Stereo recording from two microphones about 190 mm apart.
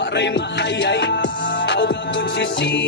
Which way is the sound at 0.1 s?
65° left (ahead or behind).